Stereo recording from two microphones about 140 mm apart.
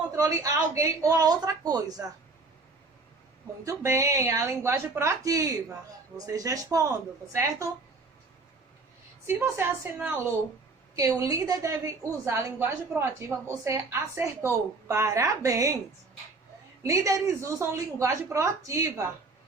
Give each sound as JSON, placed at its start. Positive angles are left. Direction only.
{"t": 0.2, "sound": "a woman's voice", "side_deg": -25}
{"t": 3.6, "sound": "a woman's voice", "side_deg": -20}
{"t": 9.2, "sound": "a woman's voice", "side_deg": -15}
{"t": 16.8, "sound": "a woman's voice", "side_deg": -20}